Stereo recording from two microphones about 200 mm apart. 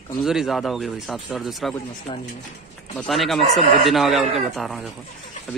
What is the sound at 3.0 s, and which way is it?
Speech, centre (ahead or behind).